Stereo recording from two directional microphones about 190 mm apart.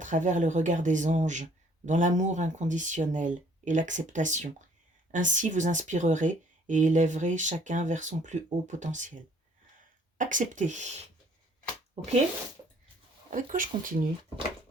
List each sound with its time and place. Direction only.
0.0 s speech: 40° right (ahead or behind)
13.3 s speech: 45° right (ahead or behind)